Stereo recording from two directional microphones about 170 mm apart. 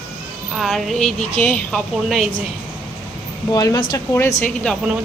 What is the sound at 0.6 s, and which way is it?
Speech, centre (ahead or behind).